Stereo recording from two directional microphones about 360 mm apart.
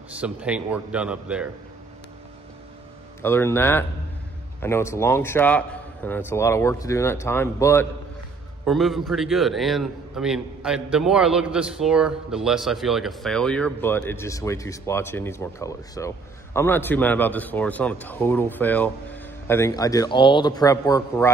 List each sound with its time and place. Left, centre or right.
0.2 s a man's voice: centre
3.2 s a man's voice: centre